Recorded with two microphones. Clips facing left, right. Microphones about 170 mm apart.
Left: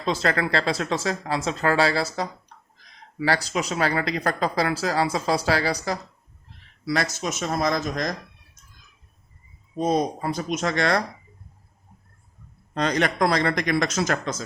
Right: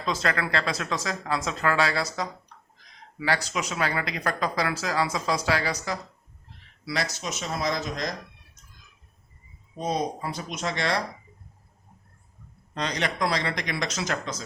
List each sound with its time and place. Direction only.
0.0 s speech: 30° left (ahead or behind)
3.2 s speech: 35° left (ahead or behind)
6.8 s speech: 50° left (ahead or behind)
9.8 s speech: 50° left (ahead or behind)
12.7 s speech: 50° left (ahead or behind)